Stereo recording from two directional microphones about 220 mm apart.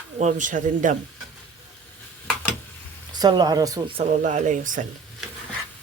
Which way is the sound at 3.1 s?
20° right (ahead or behind).